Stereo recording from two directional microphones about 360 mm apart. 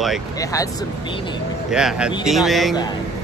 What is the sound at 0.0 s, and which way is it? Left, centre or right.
Speech, centre.